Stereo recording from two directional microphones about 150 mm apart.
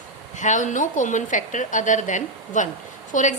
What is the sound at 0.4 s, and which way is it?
A woman's voice, 55° left (ahead or behind).